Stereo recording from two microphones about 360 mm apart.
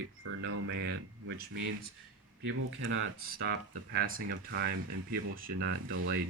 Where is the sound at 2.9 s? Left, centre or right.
Right.